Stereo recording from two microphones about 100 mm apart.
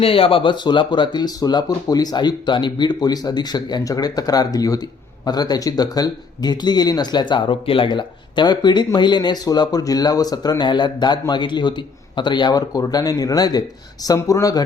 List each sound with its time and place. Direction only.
0.0 s speech: 70° left (ahead or behind); by 14.6 s 35° left (ahead or behind)